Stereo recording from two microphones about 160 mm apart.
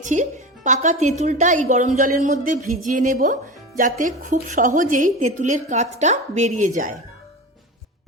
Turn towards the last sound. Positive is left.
turn(degrees=-50)  # may be behind; listen again after turning